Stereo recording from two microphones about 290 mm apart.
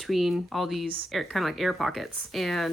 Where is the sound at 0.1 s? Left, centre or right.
Centre.